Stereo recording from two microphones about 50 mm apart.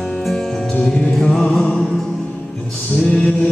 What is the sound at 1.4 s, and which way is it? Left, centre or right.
Music, centre.